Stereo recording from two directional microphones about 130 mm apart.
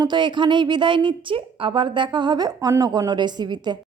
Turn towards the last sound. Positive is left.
turn(degrees=-35)  # may be behind; listen again after turning